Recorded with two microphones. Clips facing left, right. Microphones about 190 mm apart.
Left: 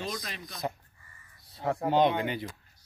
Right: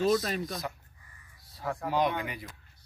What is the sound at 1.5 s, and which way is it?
Speech, 25° left (ahead or behind).